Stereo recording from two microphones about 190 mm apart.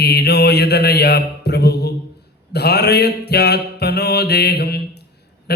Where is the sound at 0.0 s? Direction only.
60° left (ahead or behind).